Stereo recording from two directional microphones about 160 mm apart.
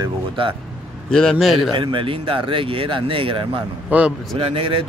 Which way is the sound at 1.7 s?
30° right (ahead or behind).